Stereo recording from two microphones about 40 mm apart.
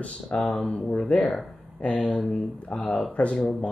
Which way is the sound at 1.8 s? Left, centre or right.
Left.